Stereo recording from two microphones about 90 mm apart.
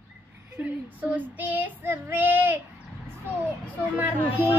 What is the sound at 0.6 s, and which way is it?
Child singing, 20° right (ahead or behind).